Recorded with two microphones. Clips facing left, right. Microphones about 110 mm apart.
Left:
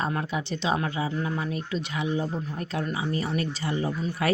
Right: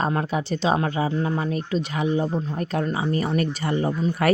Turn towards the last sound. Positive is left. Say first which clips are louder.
# right 5 dB
turn(degrees=-45)  # may be behind; listen again after turning